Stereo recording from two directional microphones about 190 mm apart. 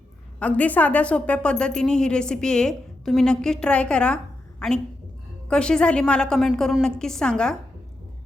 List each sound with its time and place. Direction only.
0.3 s speech: 5° left (ahead or behind)
5.5 s speech: 5° left (ahead or behind)